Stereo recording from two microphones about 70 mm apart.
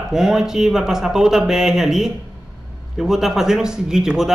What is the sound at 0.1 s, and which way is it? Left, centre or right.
A man's voice, centre.